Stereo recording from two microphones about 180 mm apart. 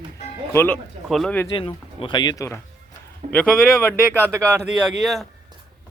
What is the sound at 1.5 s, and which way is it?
Speech, 30° left (ahead or behind).